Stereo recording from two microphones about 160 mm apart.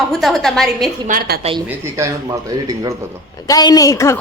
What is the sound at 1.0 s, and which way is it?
Speech, 60° right (ahead or behind).